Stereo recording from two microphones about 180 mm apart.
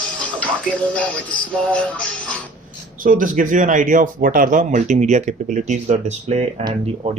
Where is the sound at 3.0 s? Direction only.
45° right (ahead or behind).